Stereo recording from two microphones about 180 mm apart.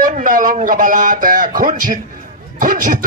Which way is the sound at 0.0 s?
50° right (ahead or behind).